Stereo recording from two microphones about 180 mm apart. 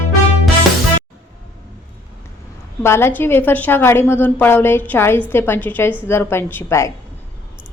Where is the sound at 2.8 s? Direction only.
15° left (ahead or behind).